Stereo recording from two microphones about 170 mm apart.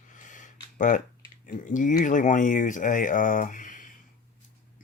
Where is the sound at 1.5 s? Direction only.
50° left (ahead or behind).